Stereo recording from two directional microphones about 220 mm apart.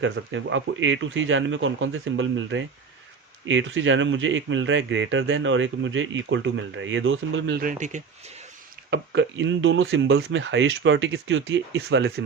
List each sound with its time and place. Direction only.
0.0 s speech: 60° right (ahead or behind); by 8.0 s 35° right (ahead or behind)
8.9 s speech: 55° right (ahead or behind)